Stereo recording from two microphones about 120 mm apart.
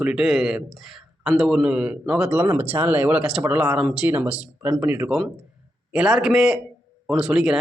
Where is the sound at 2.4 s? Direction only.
20° right (ahead or behind).